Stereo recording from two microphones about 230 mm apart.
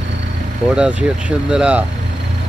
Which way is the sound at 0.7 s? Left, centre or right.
Centre.